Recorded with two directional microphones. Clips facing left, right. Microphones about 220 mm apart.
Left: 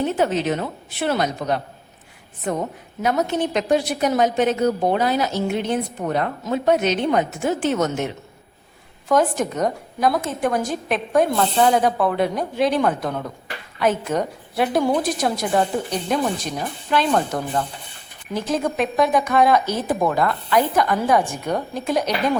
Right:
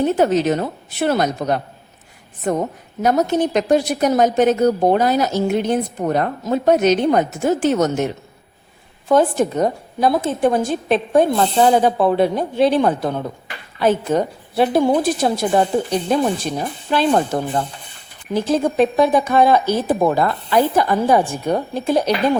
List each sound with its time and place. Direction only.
0.0 s a woman's voice: 40° right (ahead or behind)
9.0 s a woman's voice: 30° right (ahead or behind)